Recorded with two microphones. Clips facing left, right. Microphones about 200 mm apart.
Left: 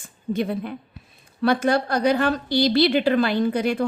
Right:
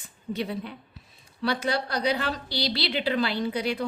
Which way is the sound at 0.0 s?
50° left (ahead or behind).